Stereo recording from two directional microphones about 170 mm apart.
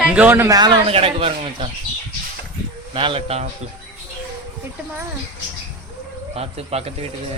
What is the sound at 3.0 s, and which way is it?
Speech, 30° right (ahead or behind).